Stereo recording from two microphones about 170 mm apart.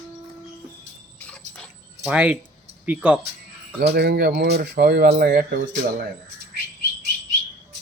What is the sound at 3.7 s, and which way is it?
Speech, 75° right (ahead or behind).